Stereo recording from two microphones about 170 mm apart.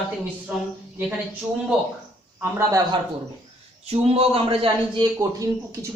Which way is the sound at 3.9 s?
35° right (ahead or behind).